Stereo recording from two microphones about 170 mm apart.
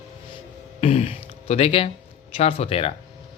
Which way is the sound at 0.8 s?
35° left (ahead or behind).